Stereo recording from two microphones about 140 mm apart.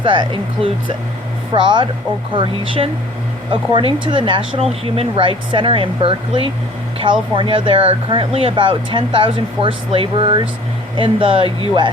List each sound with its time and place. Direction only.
0.0 s speech: 35° right (ahead or behind)